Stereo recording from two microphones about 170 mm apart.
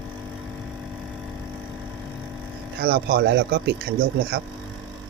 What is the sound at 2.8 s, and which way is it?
Speech, 65° right (ahead or behind).